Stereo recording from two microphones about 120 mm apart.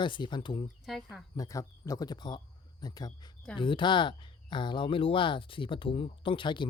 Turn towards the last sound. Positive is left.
turn(degrees=45)  # may be behind; listen again after turning